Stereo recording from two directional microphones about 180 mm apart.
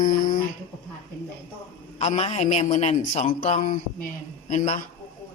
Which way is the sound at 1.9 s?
35° left (ahead or behind).